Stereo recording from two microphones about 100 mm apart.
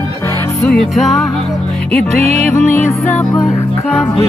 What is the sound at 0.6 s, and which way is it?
Music, centre (ahead or behind).